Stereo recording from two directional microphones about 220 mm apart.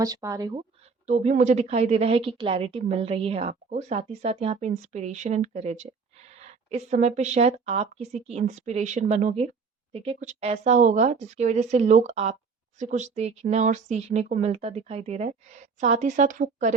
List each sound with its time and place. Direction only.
0.0 s speech: 15° right (ahead or behind)
1.0 s a woman's voice: 30° right (ahead or behind)